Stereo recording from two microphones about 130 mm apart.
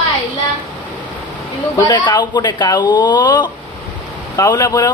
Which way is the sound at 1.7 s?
35° left (ahead or behind).